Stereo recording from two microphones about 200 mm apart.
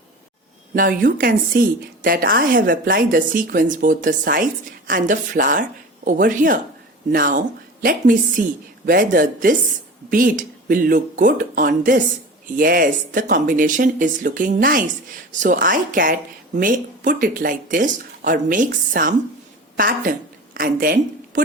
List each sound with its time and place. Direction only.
0.7 s a woman's voice: 45° right (ahead or behind)